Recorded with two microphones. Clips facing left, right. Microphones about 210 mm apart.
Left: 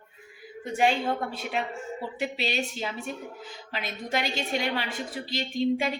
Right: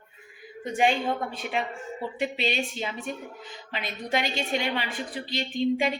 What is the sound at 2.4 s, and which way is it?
A woman's voice, 5° left (ahead or behind).